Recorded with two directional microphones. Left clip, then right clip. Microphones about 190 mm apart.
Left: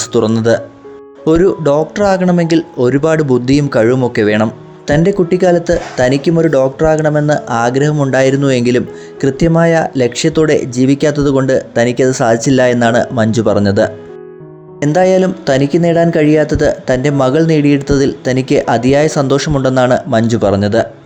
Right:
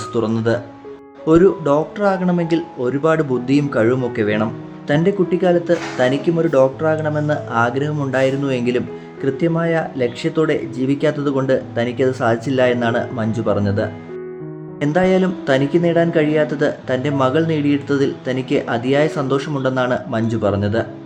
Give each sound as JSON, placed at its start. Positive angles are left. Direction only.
{"t": 0.0, "sound": "speech", "side_deg": 35}